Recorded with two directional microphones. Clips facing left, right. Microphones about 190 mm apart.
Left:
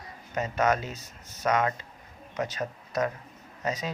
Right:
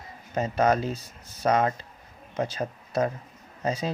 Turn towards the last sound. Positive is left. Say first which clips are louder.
# right 3 dB
turn(degrees=-30)  # may be behind; listen again after turning